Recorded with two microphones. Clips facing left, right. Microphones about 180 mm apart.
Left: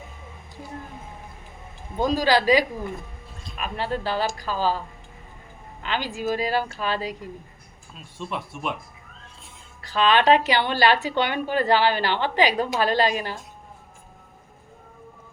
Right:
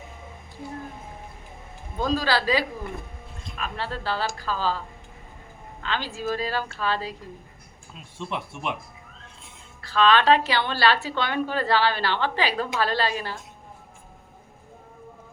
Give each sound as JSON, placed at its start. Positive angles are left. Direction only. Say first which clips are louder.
{"t": 2.0, "sound": "a woman's voice", "louder": "left 4 dB", "side_deg": 15}
{"t": 5.8, "sound": "a woman's voice", "louder": "left 2 dB", "side_deg": 15}
{"t": 9.8, "sound": "a woman's voice", "louder": "even", "side_deg": 15}